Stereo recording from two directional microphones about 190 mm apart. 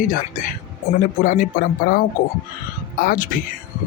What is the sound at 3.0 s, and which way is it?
Speech, 45° left (ahead or behind).